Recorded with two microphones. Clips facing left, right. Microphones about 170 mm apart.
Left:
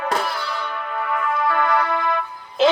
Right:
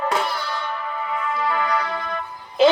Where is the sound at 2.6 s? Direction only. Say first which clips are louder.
Right 2 dB; centre (ahead or behind).